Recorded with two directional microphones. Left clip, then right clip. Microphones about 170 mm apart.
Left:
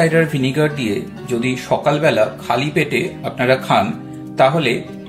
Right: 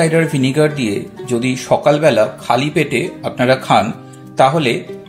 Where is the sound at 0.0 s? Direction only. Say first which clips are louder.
Right 1 dB; 50° right (ahead or behind).